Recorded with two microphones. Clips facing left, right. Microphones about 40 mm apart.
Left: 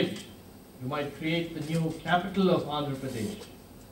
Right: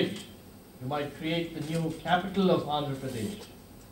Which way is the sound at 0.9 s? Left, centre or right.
Left.